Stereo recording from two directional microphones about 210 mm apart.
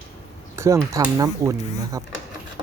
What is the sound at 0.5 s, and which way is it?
Speech, 15° right (ahead or behind).